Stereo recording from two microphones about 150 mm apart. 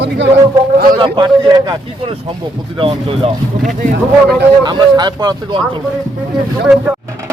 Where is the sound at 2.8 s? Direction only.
40° right (ahead or behind).